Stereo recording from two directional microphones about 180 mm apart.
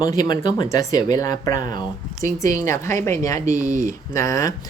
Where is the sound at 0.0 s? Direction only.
20° left (ahead or behind).